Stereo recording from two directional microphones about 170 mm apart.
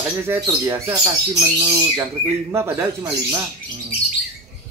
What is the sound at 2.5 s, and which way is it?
Speech, 20° right (ahead or behind).